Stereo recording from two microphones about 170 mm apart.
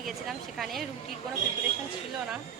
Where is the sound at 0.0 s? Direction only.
Centre (ahead or behind).